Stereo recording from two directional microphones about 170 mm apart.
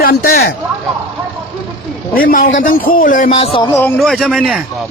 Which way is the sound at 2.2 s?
55° left (ahead or behind).